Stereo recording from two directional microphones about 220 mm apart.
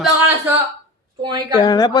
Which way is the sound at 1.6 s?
20° left (ahead or behind).